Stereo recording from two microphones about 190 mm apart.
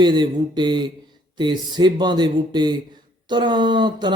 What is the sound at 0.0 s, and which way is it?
A man's voice, 25° right (ahead or behind).